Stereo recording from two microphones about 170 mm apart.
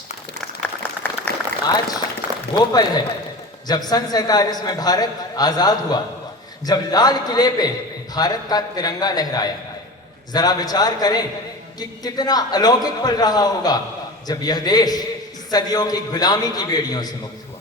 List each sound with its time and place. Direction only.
0.8 s applause: 10° left (ahead or behind)
2.2 s a sound: 10° right (ahead or behind)
2.6 s a man's voice: 25° left (ahead or behind)